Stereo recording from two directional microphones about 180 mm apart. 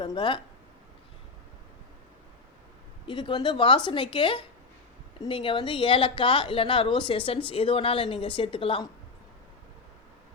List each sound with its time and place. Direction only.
0.0 s speech: 25° left (ahead or behind)
3.1 s speech: 25° left (ahead or behind)